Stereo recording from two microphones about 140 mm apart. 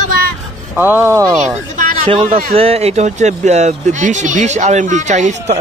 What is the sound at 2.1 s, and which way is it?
Speech, 90° right.